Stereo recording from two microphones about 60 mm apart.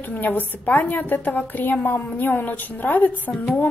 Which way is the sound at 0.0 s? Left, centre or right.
Left.